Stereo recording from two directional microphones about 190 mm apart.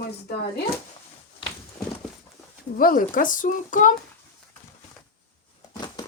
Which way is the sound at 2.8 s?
45° left (ahead or behind).